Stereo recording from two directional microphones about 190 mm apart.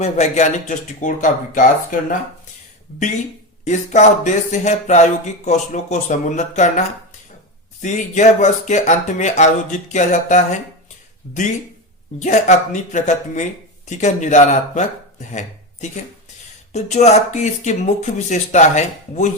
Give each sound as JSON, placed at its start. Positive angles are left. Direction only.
{"t": 0.0, "sound": "speech", "side_deg": 40}
{"t": 3.6, "sound": "speech", "side_deg": 40}
{"t": 12.2, "sound": "speech", "side_deg": 40}